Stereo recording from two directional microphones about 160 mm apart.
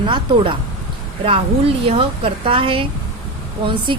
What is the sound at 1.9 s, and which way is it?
A woman's voice, 35° right (ahead or behind).